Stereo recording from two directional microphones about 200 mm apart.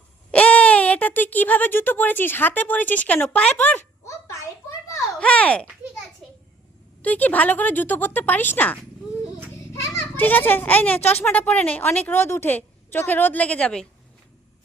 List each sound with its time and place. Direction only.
0.3 s a child's voice: 5° left (ahead or behind)
7.0 s a child's voice: 10° left (ahead or behind)
9.8 s a child's voice: 10° left (ahead or behind)